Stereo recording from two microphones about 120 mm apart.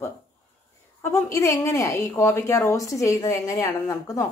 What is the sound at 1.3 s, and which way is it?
A woman's voice, 25° left (ahead or behind).